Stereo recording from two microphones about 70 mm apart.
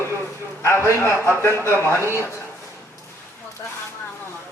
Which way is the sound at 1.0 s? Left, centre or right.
Right.